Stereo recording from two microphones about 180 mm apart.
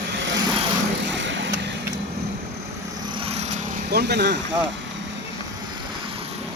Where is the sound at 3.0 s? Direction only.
30° right (ahead or behind).